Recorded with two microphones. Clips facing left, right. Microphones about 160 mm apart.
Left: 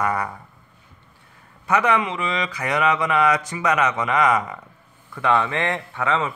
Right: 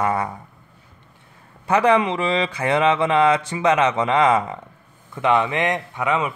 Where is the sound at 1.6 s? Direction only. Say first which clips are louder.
Right 3 dB; 30° right (ahead or behind).